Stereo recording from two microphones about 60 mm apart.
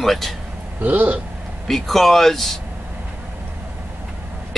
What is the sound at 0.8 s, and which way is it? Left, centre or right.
Speech, right.